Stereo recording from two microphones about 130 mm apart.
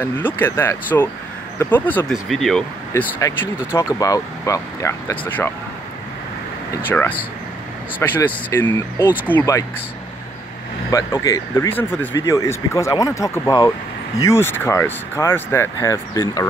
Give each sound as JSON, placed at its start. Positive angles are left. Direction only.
{"t": 0.0, "sound": "speech", "side_deg": 15}
{"t": 2.2, "sound": "speech", "side_deg": 0}
{"t": 2.9, "sound": "speech", "side_deg": 25}
{"t": 5.1, "sound": "speech", "side_deg": 10}
{"t": 6.9, "sound": "speech", "side_deg": 15}
{"t": 8.2, "sound": "speech", "side_deg": 15}
{"t": 10.9, "sound": "speech", "side_deg": 25}